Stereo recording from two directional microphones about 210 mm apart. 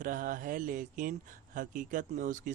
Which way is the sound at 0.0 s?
40° right (ahead or behind).